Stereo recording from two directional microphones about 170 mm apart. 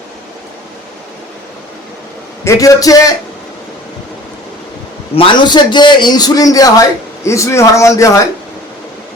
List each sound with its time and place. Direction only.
2.4 s a man's voice: 20° left (ahead or behind)
5.1 s a man's voice: 30° left (ahead or behind)